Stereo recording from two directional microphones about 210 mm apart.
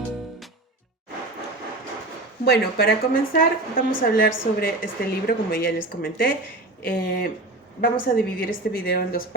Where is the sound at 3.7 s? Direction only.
40° left (ahead or behind).